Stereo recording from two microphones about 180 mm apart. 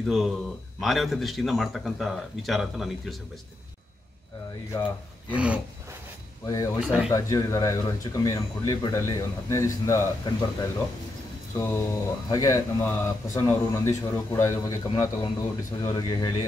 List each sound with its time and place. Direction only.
0.0 s speech: centre (ahead or behind)
5.3 s a sound: 5° right (ahead or behind)
6.4 s speech: 20° left (ahead or behind)
6.8 s speech: 5° right (ahead or behind)
7.1 s speech: 20° left (ahead or behind)